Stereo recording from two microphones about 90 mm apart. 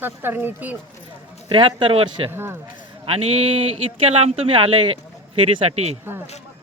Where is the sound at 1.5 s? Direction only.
70° right (ahead or behind).